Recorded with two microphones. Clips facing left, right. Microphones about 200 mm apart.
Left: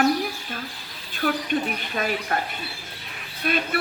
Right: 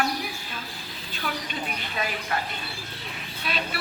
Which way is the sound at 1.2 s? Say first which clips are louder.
Left 9 dB; 50° left (ahead or behind).